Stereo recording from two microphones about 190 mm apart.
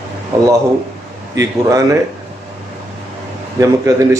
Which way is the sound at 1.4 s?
15° right (ahead or behind).